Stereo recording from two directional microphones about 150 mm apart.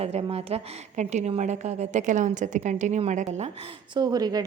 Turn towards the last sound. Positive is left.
turn(degrees=-25)  # may be behind; listen again after turning